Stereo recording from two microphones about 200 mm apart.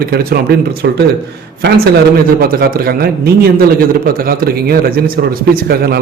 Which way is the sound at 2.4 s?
50° right (ahead or behind).